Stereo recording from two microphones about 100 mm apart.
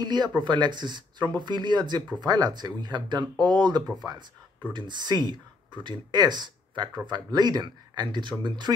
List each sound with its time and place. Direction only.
0.0 s speech: 45° right (ahead or behind)